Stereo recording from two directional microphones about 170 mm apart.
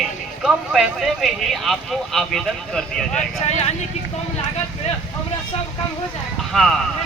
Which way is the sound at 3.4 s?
40° left (ahead or behind).